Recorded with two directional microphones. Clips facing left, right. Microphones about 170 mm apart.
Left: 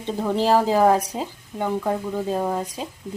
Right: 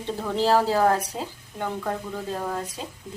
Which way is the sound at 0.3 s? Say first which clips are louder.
Left 2 dB; 15° left (ahead or behind).